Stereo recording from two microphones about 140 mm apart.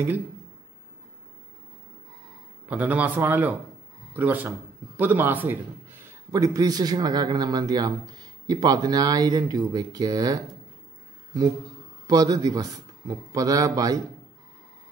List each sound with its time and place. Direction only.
2.7 s a man's voice: 10° right (ahead or behind); by 10.4 s 30° right (ahead or behind)
12.1 s a man's voice: 30° right (ahead or behind)